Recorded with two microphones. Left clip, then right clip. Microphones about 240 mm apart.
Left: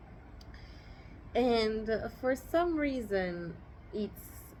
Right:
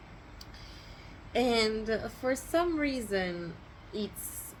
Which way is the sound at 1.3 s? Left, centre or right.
Centre.